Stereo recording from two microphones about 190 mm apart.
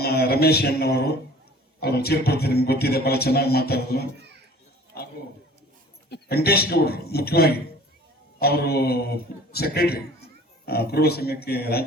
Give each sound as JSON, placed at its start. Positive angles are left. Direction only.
{"t": 0.0, "sound": "a man's voice", "side_deg": 55}